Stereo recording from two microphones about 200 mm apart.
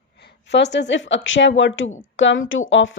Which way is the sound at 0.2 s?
55° left (ahead or behind).